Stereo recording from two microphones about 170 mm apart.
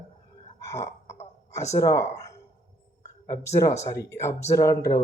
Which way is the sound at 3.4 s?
15° left (ahead or behind).